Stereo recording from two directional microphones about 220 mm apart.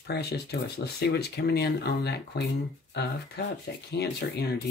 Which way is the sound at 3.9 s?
45° left (ahead or behind).